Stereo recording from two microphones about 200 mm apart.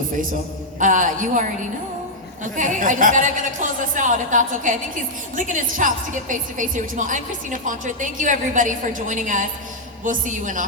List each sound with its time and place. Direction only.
0.8 s a woman's voice: 40° right (ahead or behind)